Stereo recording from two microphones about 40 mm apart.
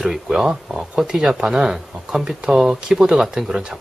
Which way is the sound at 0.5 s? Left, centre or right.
Centre.